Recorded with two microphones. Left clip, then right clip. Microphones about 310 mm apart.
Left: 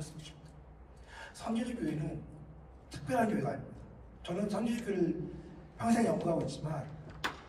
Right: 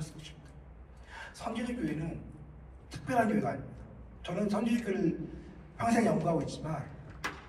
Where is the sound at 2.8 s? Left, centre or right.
Right.